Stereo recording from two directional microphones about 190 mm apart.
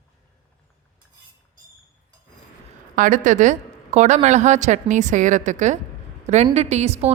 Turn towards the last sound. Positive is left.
turn(degrees=-35)  # may be behind; listen again after turning